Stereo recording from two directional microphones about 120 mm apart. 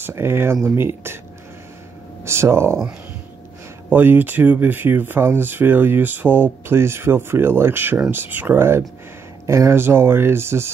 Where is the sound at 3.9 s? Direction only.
15° right (ahead or behind).